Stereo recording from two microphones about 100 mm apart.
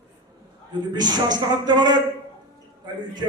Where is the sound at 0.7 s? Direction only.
45° right (ahead or behind).